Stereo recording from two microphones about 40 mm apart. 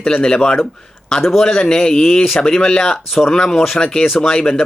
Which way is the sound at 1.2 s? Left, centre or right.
Centre.